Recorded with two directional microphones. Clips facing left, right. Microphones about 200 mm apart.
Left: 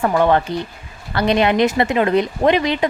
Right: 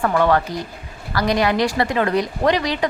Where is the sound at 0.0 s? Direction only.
20° left (ahead or behind).